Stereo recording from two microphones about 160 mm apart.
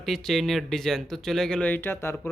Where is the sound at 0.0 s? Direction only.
Centre (ahead or behind).